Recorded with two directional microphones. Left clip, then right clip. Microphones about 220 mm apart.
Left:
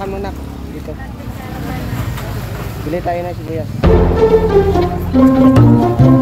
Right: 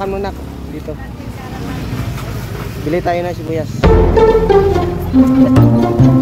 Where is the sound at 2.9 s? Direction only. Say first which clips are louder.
Right 3 dB; 45° right (ahead or behind).